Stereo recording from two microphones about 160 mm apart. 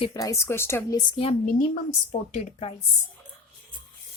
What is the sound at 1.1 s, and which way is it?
A woman's voice, 35° left (ahead or behind).